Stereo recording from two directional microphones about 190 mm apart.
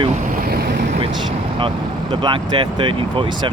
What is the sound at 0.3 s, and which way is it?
Vehicle, 50° right (ahead or behind).